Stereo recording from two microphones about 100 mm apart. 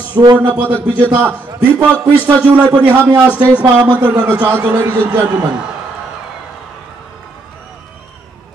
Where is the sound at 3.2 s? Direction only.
15° right (ahead or behind).